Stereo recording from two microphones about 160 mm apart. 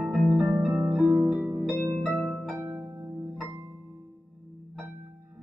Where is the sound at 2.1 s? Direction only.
Centre (ahead or behind).